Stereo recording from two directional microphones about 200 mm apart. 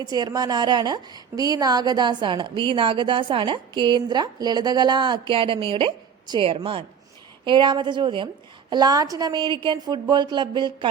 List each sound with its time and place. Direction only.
0.1 s a woman's voice: 20° right (ahead or behind)